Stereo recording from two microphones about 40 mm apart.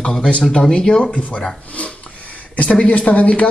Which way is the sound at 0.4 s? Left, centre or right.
Centre.